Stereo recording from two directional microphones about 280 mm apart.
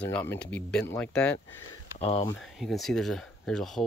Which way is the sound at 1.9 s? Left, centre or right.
Left.